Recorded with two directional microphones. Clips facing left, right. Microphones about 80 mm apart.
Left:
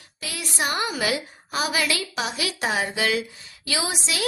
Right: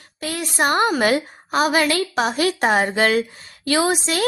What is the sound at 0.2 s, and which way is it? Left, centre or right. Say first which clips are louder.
A woman's voice: right 7 dB; right.